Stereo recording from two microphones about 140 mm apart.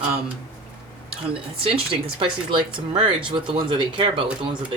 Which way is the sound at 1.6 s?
40° right (ahead or behind).